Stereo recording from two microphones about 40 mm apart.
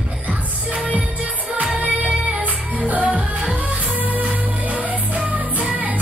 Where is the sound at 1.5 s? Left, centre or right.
Right.